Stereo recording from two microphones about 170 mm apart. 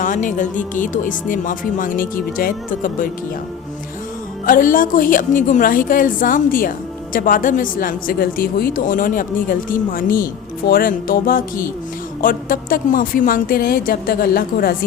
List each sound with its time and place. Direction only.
0.0 s a woman's voice: 50° left (ahead or behind)
4.4 s a woman's voice: 55° left (ahead or behind)